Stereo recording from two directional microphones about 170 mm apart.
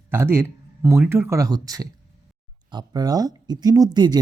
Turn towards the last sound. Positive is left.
turn(degrees=-25)  # may be behind; listen again after turning